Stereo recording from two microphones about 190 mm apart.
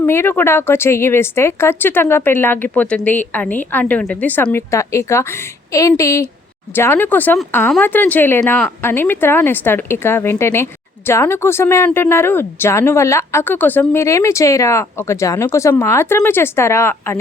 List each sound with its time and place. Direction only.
0.0 s speech: 10° left (ahead or behind)